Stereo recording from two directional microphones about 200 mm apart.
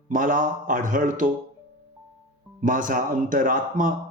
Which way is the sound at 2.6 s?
40° right (ahead or behind).